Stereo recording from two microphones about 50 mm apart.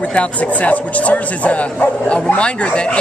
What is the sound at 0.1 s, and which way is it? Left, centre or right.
Speech, left.